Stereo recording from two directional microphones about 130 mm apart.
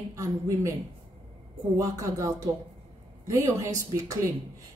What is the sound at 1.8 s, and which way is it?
Speech, 25° right (ahead or behind).